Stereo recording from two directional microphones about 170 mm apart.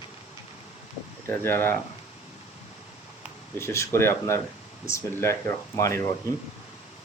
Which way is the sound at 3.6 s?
15° left (ahead or behind).